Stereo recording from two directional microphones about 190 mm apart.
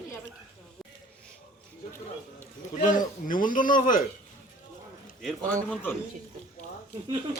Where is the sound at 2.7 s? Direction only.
45° left (ahead or behind).